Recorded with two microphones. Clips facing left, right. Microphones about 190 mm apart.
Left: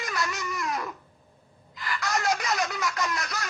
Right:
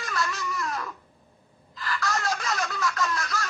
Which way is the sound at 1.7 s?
20° left (ahead or behind).